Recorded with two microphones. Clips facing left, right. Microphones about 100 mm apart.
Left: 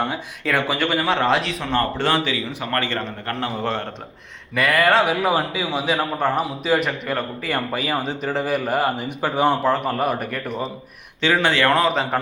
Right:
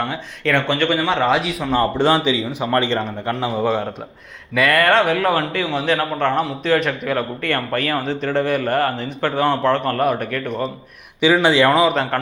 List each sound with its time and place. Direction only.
0.0 s a man's voice: 5° left (ahead or behind)
1.8 s a man's voice: 15° right (ahead or behind)
3.3 s a man's voice: 5° right (ahead or behind)
4.5 s a man's voice: centre (ahead or behind)
5.1 s a man's voice: 15° left (ahead or behind)
8.3 s a man's voice: 5° left (ahead or behind)
11.2 s a man's voice: 15° right (ahead or behind)
11.7 s a man's voice: 5° right (ahead or behind)